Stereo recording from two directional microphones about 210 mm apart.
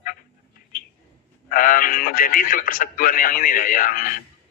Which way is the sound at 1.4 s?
40° left (ahead or behind).